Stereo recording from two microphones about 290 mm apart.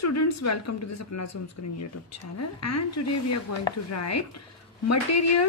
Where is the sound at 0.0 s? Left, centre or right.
Left.